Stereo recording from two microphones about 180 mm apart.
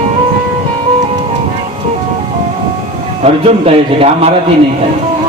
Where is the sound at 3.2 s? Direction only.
35° right (ahead or behind).